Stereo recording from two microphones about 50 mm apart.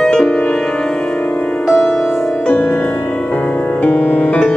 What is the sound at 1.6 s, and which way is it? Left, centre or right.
Music, centre.